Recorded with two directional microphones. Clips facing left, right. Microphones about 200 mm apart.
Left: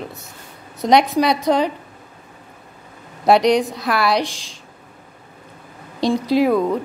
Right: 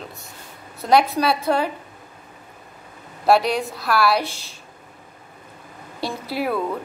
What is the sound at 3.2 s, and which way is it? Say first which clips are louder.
A woman's voice: left 4 dB; 20° left (ahead or behind).